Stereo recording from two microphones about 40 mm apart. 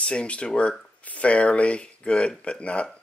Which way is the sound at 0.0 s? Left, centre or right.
Left.